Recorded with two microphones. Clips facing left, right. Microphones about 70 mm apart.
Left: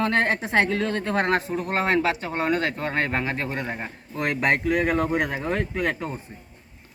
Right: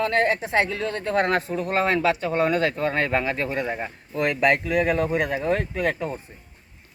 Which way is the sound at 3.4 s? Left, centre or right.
Centre.